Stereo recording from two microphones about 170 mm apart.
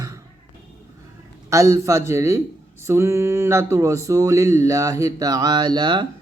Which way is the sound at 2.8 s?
15° right (ahead or behind).